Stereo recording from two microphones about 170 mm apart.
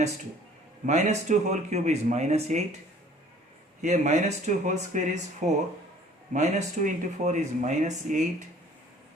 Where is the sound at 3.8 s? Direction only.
45° right (ahead or behind).